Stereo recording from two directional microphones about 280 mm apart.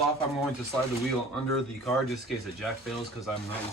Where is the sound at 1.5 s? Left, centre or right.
Centre.